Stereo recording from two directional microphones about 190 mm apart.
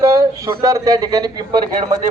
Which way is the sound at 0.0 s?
15° right (ahead or behind).